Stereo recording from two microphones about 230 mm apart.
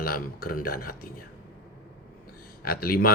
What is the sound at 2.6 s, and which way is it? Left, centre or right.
Speech, left.